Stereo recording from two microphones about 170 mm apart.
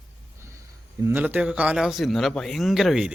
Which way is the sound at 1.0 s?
10° right (ahead or behind).